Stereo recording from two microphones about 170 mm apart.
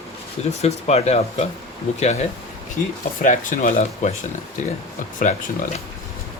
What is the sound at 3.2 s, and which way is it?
Speech, 55° left (ahead or behind).